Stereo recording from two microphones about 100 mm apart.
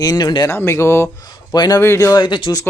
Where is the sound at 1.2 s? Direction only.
45° left (ahead or behind).